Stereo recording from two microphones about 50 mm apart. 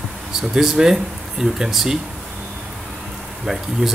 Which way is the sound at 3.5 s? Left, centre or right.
Centre.